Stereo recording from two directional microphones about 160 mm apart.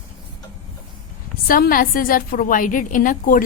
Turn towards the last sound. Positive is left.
turn(degrees=60)  # may be behind; listen again after turning